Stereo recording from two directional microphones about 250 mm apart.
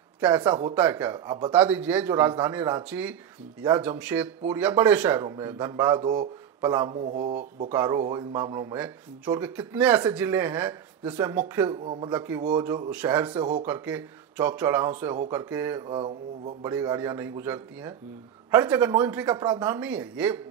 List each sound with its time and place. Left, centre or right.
0.2 s speech: centre
7.0 s speech: right
7.7 s speech: centre
11.8 s speech: right
12.1 s speech: centre
15.9 s speech: centre
16.7 s speech: centre